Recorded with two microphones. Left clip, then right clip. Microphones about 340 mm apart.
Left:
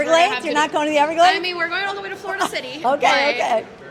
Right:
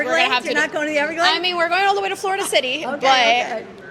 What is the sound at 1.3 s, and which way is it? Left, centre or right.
A woman's voice, right.